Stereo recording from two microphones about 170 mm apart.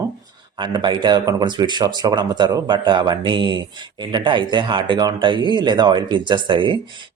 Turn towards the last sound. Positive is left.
turn(degrees=-30)  # may be behind; listen again after turning